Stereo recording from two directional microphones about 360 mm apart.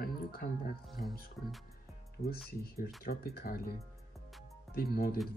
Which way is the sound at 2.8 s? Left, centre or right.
Centre.